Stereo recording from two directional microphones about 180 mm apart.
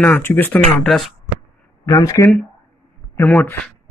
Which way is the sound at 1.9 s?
20° left (ahead or behind).